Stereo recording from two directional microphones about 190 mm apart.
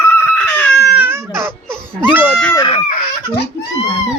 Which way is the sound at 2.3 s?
Centre (ahead or behind).